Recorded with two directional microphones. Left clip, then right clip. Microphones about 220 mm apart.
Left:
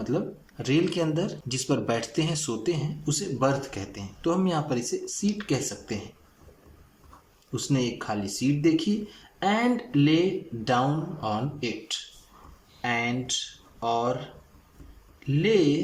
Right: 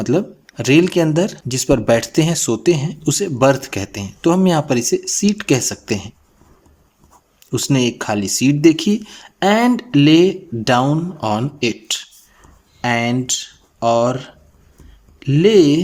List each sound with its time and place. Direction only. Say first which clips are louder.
0.0 s speech: right 11 dB; 45° right (ahead or behind)
7.5 s speech: right 11 dB; 45° right (ahead or behind)